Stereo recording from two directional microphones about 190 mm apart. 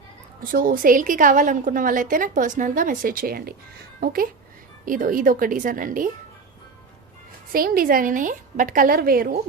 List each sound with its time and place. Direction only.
0.4 s a woman's voice: 45° right (ahead or behind)
7.5 s a woman's voice: 50° right (ahead or behind)